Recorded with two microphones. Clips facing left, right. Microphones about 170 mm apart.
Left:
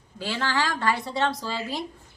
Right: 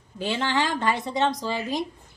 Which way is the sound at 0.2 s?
20° right (ahead or behind).